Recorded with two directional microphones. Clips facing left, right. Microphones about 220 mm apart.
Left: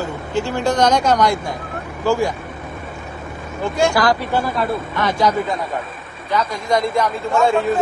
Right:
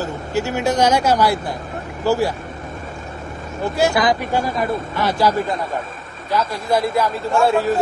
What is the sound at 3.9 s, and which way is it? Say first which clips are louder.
Speech: left 1 dB; 15° right (ahead or behind).